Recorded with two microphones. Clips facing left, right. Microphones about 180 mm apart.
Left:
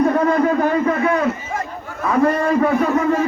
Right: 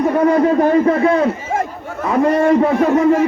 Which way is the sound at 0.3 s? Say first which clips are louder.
Right 4 dB; 30° right (ahead or behind).